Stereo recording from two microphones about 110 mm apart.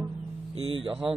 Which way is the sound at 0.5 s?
55° right (ahead or behind).